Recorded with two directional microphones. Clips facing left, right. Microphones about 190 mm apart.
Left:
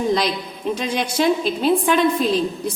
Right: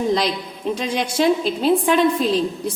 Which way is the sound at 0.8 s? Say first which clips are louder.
Right 1 dB; 30° right (ahead or behind).